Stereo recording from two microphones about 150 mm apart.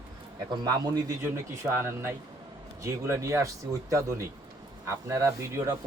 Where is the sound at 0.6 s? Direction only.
20° right (ahead or behind).